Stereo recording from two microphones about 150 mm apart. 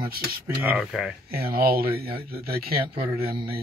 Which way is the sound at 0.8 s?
5° left (ahead or behind).